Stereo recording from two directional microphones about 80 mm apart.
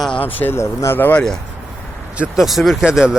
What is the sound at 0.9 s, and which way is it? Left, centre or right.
Speech, left.